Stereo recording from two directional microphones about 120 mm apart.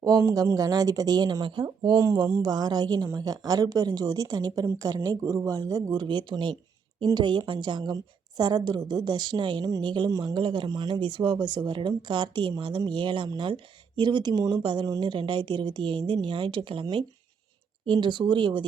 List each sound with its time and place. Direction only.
0.0 s speech: 30° right (ahead or behind); by 16.8 s 45° right (ahead or behind)
17.8 s speech: 40° right (ahead or behind)